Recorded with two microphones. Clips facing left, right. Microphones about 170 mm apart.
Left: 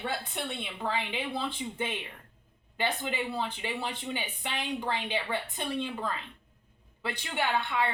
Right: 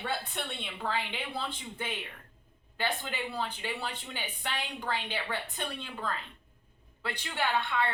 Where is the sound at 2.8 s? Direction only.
20° left (ahead or behind).